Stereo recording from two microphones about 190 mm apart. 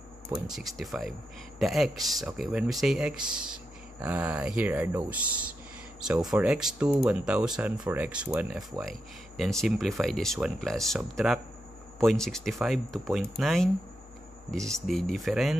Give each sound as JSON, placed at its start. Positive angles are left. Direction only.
{"t": 0.3, "sound": "speech", "side_deg": 0}
{"t": 14.9, "sound": "speech", "side_deg": 0}